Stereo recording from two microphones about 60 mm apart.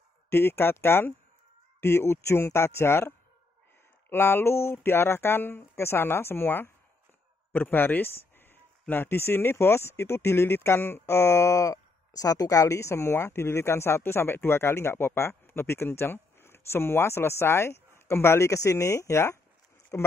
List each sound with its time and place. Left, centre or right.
0.3 s speech: left